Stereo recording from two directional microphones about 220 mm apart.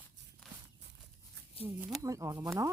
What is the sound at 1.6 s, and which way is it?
Speech, 25° left (ahead or behind).